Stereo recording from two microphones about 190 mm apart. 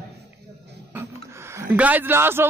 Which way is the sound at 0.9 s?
10° right (ahead or behind).